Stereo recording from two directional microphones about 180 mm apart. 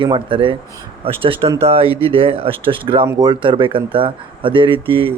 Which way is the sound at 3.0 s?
15° right (ahead or behind).